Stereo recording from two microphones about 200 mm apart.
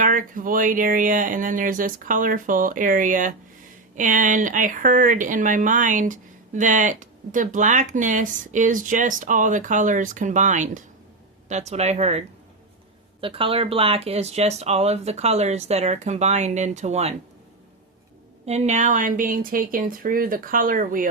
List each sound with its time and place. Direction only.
0.0 s speech: 40° right (ahead or behind)
13.2 s speech: 25° right (ahead or behind)
18.4 s speech: 35° right (ahead or behind)